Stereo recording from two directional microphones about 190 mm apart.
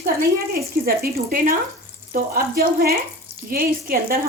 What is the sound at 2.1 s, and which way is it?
Speech, 50° right (ahead or behind).